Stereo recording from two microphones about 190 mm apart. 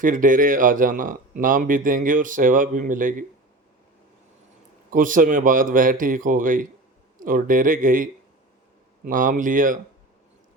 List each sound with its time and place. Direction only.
0.0 s speech: 45° right (ahead or behind)
4.9 s speech: 45° right (ahead or behind)